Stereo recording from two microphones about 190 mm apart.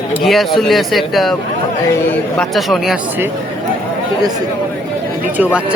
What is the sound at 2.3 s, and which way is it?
Speech, centre (ahead or behind).